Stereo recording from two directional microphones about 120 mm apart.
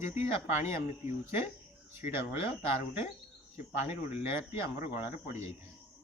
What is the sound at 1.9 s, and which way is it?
Speech, 20° right (ahead or behind).